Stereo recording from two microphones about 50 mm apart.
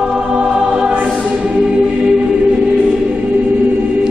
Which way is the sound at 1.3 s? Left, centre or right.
Right.